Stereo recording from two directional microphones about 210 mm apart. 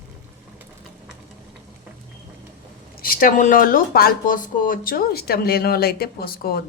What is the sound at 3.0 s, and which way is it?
Speech, 45° left (ahead or behind).